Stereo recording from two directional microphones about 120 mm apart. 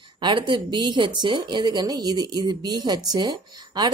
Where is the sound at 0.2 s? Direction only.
40° right (ahead or behind).